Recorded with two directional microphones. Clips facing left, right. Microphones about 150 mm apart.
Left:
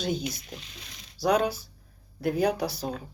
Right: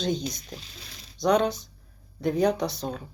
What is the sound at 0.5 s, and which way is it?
Speech, 35° right (ahead or behind).